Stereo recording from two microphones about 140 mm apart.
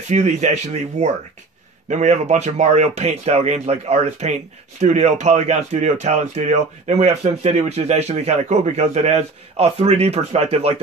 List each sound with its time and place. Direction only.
0.1 s speech: 55° right (ahead or behind)
1.9 s speech: 60° right (ahead or behind)